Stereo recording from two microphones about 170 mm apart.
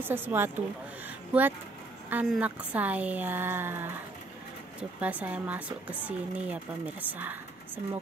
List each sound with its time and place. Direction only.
0.0 s speech: 10° right (ahead or behind)
2.0 s speech: 5° right (ahead or behind)
5.0 s speech: 10° right (ahead or behind)